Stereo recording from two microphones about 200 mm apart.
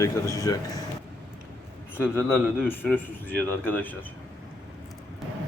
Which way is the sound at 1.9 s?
10° left (ahead or behind).